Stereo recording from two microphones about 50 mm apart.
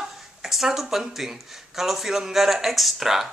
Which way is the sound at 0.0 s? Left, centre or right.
Centre.